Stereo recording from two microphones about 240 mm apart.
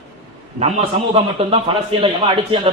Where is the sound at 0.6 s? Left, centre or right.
Right.